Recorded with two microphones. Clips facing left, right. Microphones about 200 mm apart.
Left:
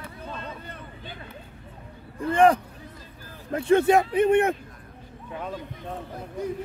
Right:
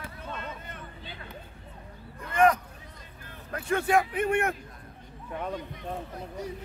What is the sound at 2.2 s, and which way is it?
Speech, 30° left (ahead or behind).